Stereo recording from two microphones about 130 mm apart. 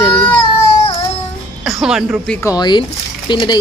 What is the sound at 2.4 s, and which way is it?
Speech, 30° left (ahead or behind).